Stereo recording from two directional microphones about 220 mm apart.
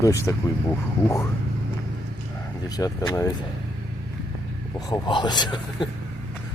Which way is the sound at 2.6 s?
15° left (ahead or behind).